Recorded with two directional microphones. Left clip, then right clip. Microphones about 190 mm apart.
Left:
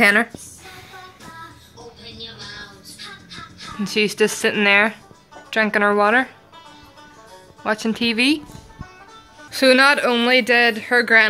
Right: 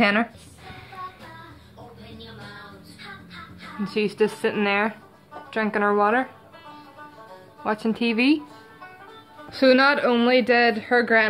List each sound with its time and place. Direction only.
0.0 s speech: 5° right (ahead or behind)
3.8 s speech: 10° left (ahead or behind)
7.6 s speech: 5° left (ahead or behind)
9.5 s speech: centre (ahead or behind)